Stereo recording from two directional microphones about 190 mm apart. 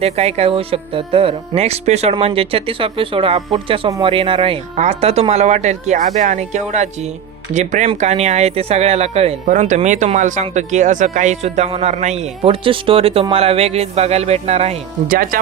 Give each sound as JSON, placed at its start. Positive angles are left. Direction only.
{"t": 0.0, "sound": "speech", "side_deg": -35}
{"t": 15.0, "sound": "speech", "side_deg": -45}